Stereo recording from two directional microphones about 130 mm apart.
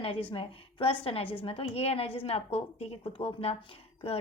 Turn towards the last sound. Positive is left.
turn(degrees=45)  # may be behind; listen again after turning